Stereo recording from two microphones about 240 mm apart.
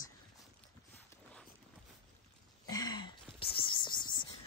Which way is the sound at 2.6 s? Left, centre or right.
Centre.